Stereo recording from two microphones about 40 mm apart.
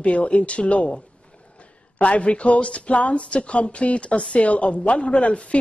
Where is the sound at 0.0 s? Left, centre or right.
Left.